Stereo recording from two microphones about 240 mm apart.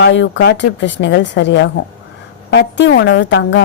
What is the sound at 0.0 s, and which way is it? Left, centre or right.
A woman's voice, left.